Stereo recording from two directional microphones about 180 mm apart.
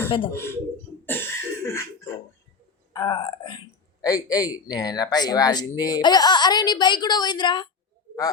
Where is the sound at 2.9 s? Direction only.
20° left (ahead or behind).